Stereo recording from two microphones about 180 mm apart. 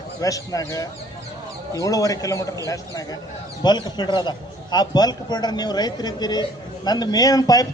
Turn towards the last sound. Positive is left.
turn(degrees=20)  # may be behind; listen again after turning